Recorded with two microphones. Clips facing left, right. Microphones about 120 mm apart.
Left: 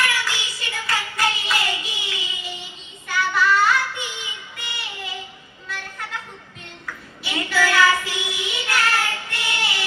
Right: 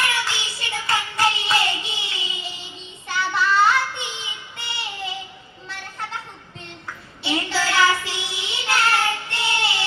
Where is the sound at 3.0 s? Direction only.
25° right (ahead or behind).